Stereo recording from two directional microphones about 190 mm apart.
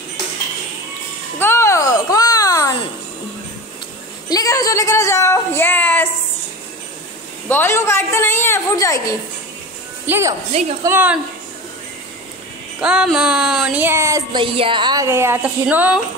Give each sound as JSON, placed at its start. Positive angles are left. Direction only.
{"t": 1.4, "sound": "a sound", "side_deg": 15}
{"t": 4.3, "sound": "a woman's voice", "side_deg": 20}
{"t": 7.4, "sound": "a woman's voice", "side_deg": 10}
{"t": 10.0, "sound": "speech", "side_deg": -10}
{"t": 12.8, "sound": "speech", "side_deg": -5}